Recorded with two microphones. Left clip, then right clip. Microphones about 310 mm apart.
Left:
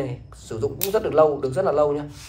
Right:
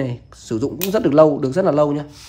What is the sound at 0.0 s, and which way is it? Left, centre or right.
A man's voice, right.